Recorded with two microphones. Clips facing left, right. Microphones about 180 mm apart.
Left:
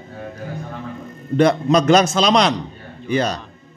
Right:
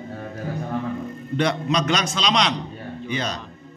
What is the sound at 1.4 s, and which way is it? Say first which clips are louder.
A man's voice: left 7 dB; 45° left (ahead or behind).